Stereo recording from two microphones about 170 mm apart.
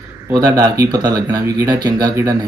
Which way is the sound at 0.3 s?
15° right (ahead or behind).